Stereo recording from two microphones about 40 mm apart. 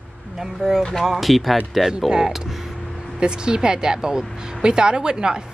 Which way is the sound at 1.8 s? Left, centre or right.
Centre.